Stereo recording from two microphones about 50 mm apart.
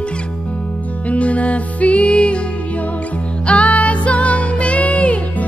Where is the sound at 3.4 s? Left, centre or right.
Left.